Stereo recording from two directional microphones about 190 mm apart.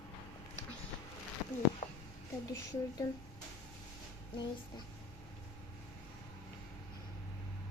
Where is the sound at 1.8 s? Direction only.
40° left (ahead or behind).